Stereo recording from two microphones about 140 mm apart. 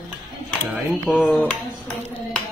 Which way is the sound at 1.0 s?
10° left (ahead or behind).